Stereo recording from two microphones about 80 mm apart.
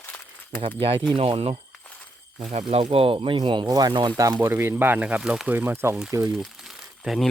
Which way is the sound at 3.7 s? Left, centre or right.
Right.